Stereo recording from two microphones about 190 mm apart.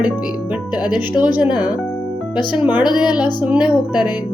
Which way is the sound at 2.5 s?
5° right (ahead or behind).